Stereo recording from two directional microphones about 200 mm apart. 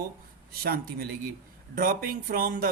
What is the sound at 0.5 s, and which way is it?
Speech, 50° right (ahead or behind).